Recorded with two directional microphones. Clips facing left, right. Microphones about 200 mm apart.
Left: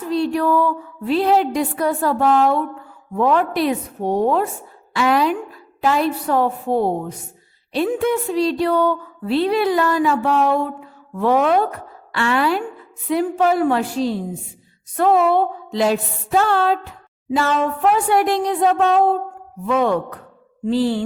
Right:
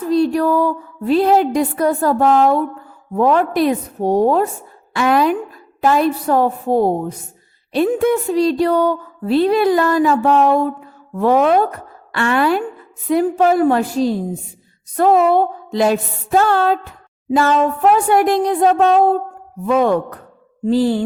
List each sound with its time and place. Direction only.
0.1 s a woman's voice: 40° right (ahead or behind)
4.9 s a woman's voice: 50° right (ahead or behind)